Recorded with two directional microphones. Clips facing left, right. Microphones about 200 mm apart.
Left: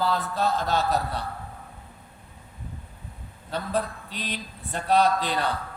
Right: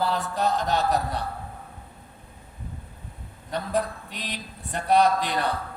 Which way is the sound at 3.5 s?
15° right (ahead or behind).